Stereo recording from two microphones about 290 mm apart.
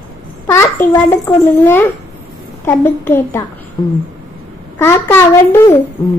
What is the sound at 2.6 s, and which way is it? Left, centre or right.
A woman's voice, centre.